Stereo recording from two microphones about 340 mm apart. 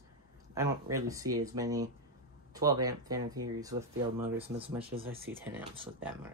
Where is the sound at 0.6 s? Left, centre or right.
Centre.